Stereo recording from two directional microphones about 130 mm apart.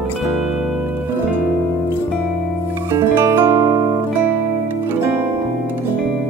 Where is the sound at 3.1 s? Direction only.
20° right (ahead or behind).